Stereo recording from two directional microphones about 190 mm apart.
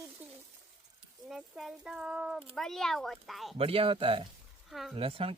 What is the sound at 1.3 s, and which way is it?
Speech, centre (ahead or behind).